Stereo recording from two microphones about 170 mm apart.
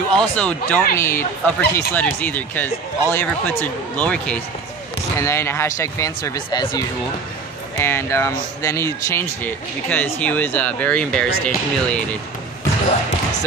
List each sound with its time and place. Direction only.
0.1 s speech: 5° left (ahead or behind)